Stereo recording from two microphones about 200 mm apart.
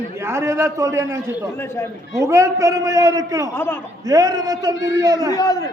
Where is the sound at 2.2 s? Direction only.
15° right (ahead or behind).